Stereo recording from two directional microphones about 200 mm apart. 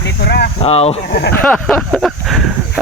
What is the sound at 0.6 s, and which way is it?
Speech, 30° left (ahead or behind).